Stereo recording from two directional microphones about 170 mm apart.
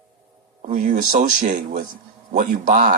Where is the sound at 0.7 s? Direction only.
45° right (ahead or behind).